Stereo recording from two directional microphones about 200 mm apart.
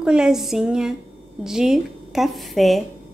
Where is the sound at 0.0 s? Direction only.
5° right (ahead or behind).